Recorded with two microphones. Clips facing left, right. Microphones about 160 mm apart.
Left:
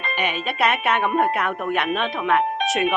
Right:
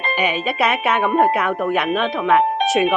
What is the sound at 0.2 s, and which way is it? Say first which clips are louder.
Speech: right 3 dB; 5° right (ahead or behind).